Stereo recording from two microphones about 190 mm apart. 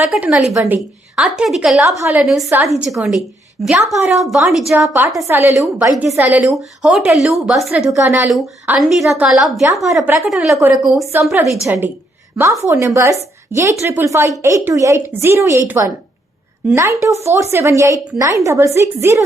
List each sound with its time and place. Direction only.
0.1 s a woman's voice: centre (ahead or behind)
2.2 s a woman's voice: centre (ahead or behind)
5.2 s a woman's voice: 10° right (ahead or behind)
5.9 s a woman's voice: centre (ahead or behind)
7.9 s a woman's voice: 15° right (ahead or behind)